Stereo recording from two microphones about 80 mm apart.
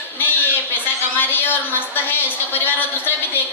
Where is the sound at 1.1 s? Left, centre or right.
Left.